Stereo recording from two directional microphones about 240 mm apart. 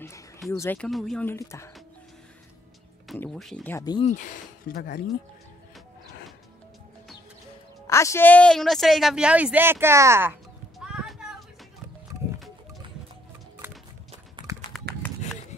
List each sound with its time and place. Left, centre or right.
0.5 s speech: centre
3.1 s speech: centre
3.7 s speech: centre
4.1 s speech: left
7.8 s speech: centre
10.8 s music: centre
14.7 s run: centre